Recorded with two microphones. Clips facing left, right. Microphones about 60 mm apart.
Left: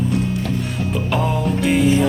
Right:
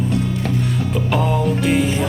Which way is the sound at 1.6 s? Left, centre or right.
Centre.